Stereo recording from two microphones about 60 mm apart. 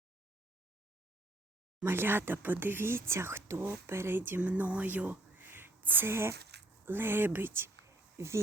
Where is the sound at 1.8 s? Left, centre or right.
Right.